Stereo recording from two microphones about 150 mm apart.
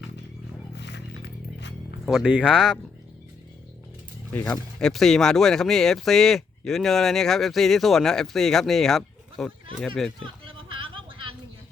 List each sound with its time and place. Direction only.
2.0 s speech: 5° right (ahead or behind)
4.3 s speech: 10° left (ahead or behind)
10.4 s a sound: 35° right (ahead or behind)